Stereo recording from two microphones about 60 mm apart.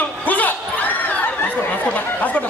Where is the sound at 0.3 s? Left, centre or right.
Left.